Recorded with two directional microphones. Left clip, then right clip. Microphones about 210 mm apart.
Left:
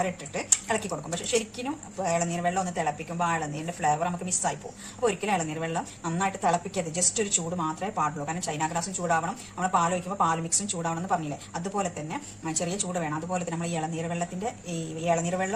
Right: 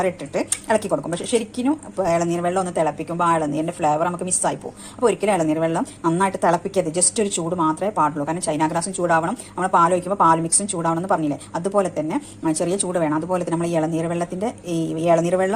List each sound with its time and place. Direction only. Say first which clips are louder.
0.0 s a woman's voice: right 8 dB; 40° right (ahead or behind)